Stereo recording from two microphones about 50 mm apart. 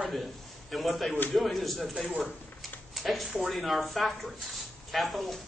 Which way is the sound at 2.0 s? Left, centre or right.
Right.